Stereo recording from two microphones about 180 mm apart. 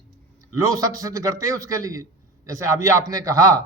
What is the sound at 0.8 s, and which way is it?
A man's voice, 20° right (ahead or behind).